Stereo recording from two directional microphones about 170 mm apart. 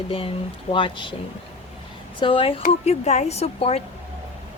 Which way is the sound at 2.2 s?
30° left (ahead or behind).